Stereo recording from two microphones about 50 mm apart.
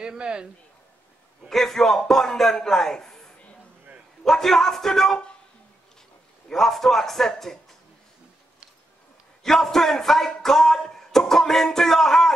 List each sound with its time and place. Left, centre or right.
0.0 s speech: centre
1.5 s a man's voice: centre
6.5 s a man's voice: centre
9.4 s speech: centre